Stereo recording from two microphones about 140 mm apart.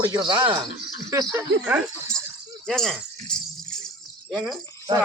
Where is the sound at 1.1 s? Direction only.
20° right (ahead or behind).